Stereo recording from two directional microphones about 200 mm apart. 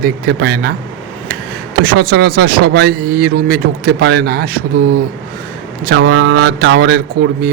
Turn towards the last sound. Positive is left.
turn(degrees=-55)  # may be behind; listen again after turning